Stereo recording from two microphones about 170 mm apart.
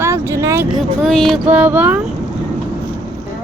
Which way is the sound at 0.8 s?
5° left (ahead or behind).